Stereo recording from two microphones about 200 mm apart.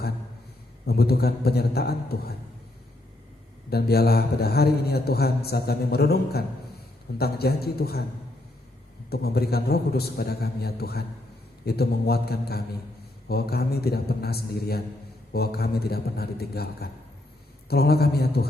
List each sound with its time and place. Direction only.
0.9 s a man's voice: 50° left (ahead or behind)
3.7 s a man's voice: 50° left (ahead or behind)
9.0 s a man's voice: 50° left (ahead or behind)